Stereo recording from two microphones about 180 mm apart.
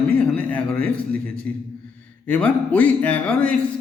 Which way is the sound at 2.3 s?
5° left (ahead or behind).